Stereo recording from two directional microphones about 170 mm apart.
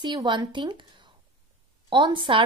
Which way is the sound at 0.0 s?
25° right (ahead or behind).